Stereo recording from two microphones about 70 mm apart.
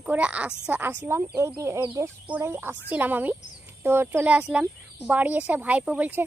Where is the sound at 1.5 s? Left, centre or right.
Right.